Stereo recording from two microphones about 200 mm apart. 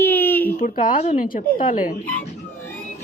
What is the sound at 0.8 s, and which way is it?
Speech, 40° left (ahead or behind).